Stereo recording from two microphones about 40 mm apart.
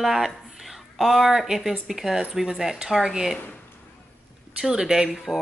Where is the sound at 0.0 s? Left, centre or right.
Centre.